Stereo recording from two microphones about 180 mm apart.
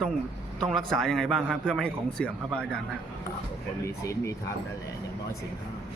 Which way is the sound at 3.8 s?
15° left (ahead or behind).